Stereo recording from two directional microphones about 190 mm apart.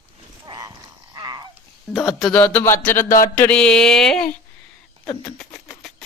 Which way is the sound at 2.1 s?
5° left (ahead or behind).